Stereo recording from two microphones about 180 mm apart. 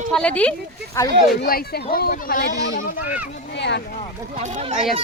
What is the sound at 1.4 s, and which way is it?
Speech, 60° left (ahead or behind).